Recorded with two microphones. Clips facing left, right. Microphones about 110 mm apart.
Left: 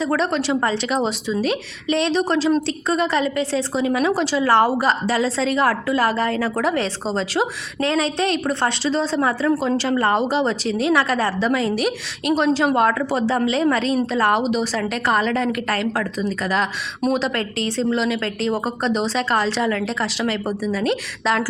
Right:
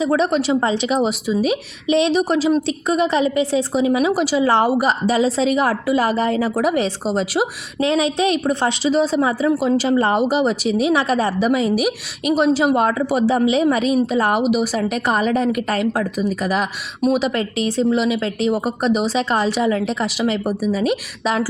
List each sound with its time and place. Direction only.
0.0 s a woman's voice: 15° right (ahead or behind)